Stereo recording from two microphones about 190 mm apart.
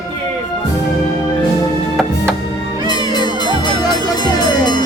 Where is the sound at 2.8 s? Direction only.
20° left (ahead or behind).